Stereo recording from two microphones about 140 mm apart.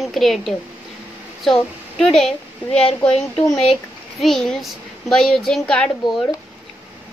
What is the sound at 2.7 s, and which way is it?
Speech, 45° left (ahead or behind).